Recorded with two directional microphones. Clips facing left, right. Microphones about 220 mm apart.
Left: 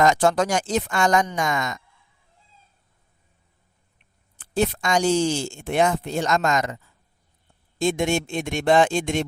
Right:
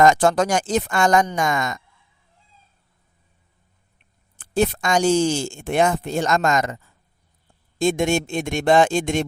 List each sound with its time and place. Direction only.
0.0 s speech: 50° right (ahead or behind)
4.4 s speech: 50° right (ahead or behind)
7.8 s speech: 45° right (ahead or behind)